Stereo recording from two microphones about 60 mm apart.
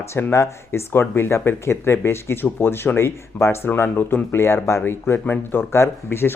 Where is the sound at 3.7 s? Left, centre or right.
Left.